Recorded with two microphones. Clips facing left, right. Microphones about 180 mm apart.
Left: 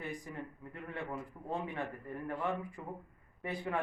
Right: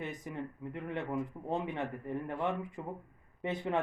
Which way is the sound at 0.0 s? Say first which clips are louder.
Right 3 dB; 20° right (ahead or behind).